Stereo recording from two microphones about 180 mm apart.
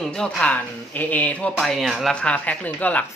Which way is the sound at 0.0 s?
5° left (ahead or behind).